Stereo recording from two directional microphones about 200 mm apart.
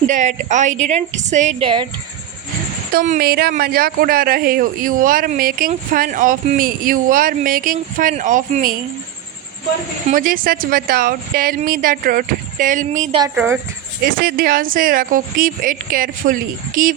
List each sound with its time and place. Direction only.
0.1 s a woman's voice: 40° right (ahead or behind)
2.9 s speech: 45° right (ahead or behind)
10.1 s speech: 45° right (ahead or behind)
13.3 s speech: 5° right (ahead or behind)
14.0 s speech: 50° right (ahead or behind)